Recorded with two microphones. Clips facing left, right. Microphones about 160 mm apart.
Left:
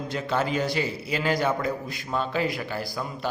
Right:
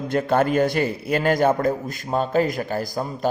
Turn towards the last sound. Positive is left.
turn(degrees=-45)  # may be behind; listen again after turning